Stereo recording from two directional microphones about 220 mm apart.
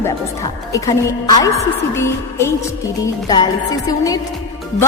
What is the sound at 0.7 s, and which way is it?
A woman's voice, 15° left (ahead or behind).